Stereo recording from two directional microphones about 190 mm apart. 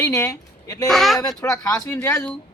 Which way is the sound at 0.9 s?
Centre (ahead or behind).